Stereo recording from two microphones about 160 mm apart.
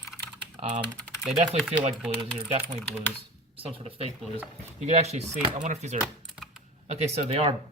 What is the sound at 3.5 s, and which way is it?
Speech, 35° right (ahead or behind).